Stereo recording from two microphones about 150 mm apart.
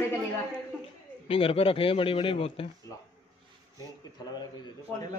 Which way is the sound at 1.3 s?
40° left (ahead or behind).